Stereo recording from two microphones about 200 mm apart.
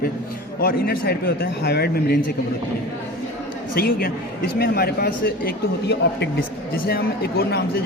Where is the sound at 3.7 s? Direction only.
45° left (ahead or behind).